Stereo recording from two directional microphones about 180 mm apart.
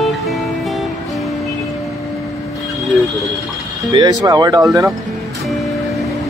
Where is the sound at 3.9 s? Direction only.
25° right (ahead or behind).